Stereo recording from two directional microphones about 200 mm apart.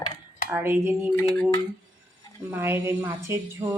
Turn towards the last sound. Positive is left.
turn(degrees=-15)  # may be behind; listen again after turning